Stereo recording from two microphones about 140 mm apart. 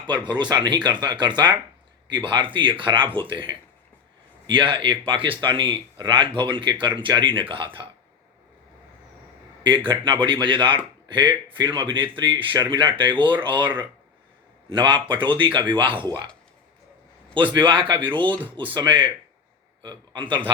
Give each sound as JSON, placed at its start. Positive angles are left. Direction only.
{"t": 0.5, "sound": "speech", "side_deg": -30}
{"t": 4.4, "sound": "speech", "side_deg": -35}
{"t": 9.6, "sound": "speech", "side_deg": -35}
{"t": 13.5, "sound": "speech", "side_deg": -10}
{"t": 14.7, "sound": "speech", "side_deg": -35}
{"t": 17.5, "sound": "speech", "side_deg": -35}